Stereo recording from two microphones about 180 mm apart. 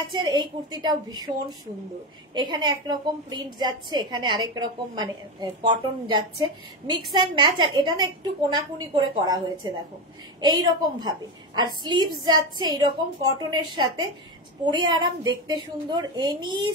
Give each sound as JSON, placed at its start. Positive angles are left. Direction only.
{"t": 0.1, "sound": "a woman's voice", "side_deg": -25}
{"t": 2.3, "sound": "a woman's voice", "side_deg": -25}